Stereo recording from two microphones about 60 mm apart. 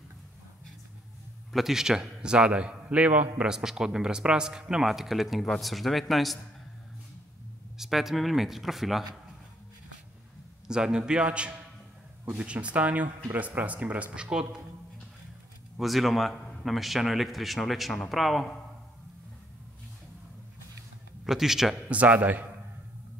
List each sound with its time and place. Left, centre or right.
1.5 s a man's voice: centre; by 3.4 s right
3.4 s speech: centre
7.7 s speech: centre
10.7 s a man's voice: centre
15.8 s speech: centre
21.2 s speech: centre
21.8 s speech: right